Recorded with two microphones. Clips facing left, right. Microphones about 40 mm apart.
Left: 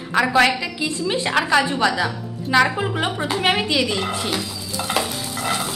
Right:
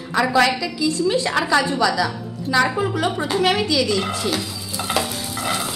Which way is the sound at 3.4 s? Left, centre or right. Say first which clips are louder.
Even; left.